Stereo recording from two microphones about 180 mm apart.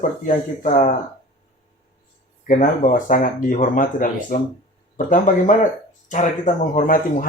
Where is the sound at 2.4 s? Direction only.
45° left (ahead or behind).